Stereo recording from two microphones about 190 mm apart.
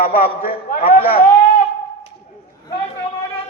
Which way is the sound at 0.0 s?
50° left (ahead or behind).